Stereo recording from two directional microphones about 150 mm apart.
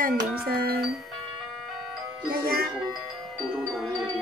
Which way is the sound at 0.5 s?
90° right.